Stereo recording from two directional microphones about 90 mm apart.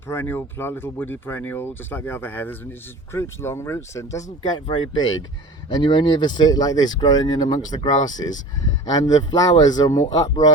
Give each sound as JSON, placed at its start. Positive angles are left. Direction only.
{"t": 0.1, "sound": "speech", "side_deg": 25}
{"t": 4.5, "sound": "speech", "side_deg": 60}